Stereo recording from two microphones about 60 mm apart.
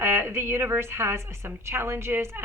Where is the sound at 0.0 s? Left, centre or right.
Right.